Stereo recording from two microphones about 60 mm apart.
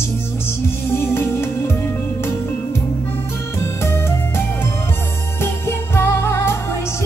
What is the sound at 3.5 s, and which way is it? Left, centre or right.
Music, left.